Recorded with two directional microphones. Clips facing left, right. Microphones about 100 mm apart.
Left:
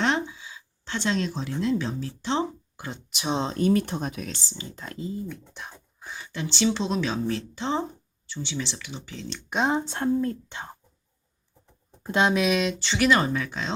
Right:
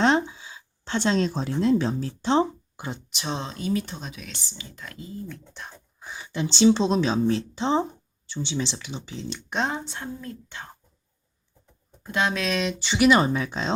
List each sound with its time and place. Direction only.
0.0 s a sound: 30° right (ahead or behind)
2.7 s speech: 20° right (ahead or behind)
3.1 s speech: 5° left (ahead or behind)
3.5 s speech: 50° left (ahead or behind)
4.4 s speech: 30° left (ahead or behind)
5.3 s speech: 5° left (ahead or behind)
6.2 s speech: 20° right (ahead or behind)
9.5 s speech: 10° left (ahead or behind)
9.9 s speech: 40° left (ahead or behind)
11.9 s speech: 25° left (ahead or behind); by 12.7 s 5° left (ahead or behind)
12.8 s speech: 15° right (ahead or behind); by 13.7 s 30° right (ahead or behind)